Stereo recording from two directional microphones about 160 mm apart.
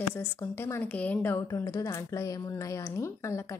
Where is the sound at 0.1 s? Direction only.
15° left (ahead or behind).